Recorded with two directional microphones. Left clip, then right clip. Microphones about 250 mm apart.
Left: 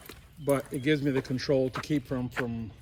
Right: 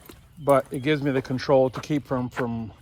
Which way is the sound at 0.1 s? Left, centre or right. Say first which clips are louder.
Right 8 dB; centre.